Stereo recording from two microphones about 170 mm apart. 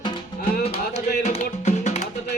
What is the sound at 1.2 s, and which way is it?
Music, 45° left (ahead or behind).